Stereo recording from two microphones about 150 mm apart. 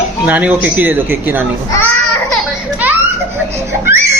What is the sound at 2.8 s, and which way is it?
Children playing, 10° right (ahead or behind).